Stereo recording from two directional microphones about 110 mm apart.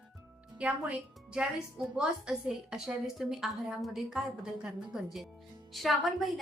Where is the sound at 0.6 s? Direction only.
10° right (ahead or behind).